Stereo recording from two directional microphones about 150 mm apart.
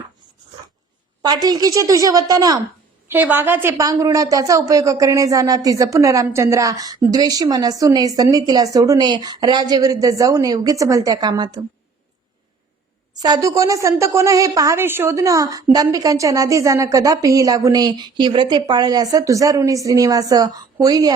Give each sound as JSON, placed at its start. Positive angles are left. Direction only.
{"t": 1.2, "sound": "a woman's voice", "side_deg": -25}
{"t": 3.1, "sound": "a woman's voice", "side_deg": -15}
{"t": 13.1, "sound": "a woman's voice", "side_deg": -25}